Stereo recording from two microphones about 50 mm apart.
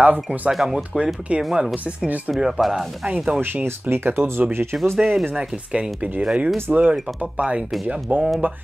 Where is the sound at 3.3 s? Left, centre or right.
Right.